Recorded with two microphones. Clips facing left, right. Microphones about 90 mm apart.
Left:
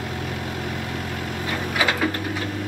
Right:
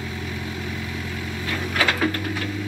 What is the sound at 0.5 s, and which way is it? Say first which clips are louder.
Vehicle: left 2 dB; 50° left (ahead or behind).